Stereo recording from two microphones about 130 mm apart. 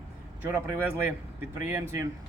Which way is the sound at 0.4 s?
15° right (ahead or behind).